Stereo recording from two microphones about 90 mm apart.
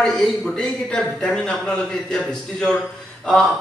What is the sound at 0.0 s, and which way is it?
A man's voice, 5° left (ahead or behind).